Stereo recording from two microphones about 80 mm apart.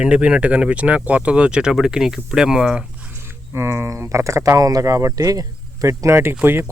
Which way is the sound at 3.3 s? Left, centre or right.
Right.